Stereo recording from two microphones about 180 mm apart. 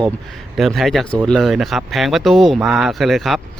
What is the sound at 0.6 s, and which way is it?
A man's voice, centre (ahead or behind).